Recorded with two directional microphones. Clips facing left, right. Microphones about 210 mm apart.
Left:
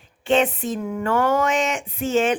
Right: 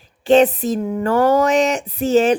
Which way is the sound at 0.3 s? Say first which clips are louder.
Right 7 dB; 35° right (ahead or behind).